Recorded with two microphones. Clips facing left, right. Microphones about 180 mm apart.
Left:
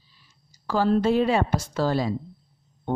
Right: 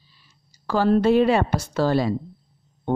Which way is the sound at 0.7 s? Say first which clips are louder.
Right 3 dB; 65° right (ahead or behind).